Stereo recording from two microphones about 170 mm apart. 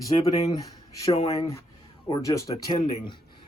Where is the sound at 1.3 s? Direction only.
20° left (ahead or behind).